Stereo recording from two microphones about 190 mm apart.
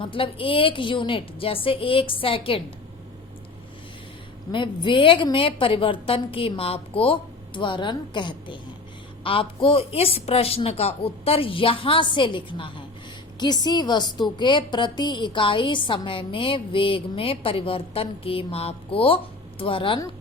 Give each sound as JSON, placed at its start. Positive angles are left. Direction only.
{"t": 0.0, "sound": "a woman's voice", "side_deg": 25}
{"t": 4.5, "sound": "a woman's voice", "side_deg": 25}